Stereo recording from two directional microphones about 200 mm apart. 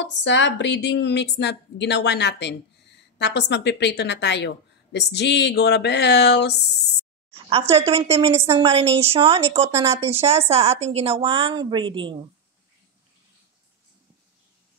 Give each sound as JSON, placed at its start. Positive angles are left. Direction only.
{"t": 0.0, "sound": "speech", "side_deg": 65}
{"t": 7.4, "sound": "a woman's voice", "side_deg": -30}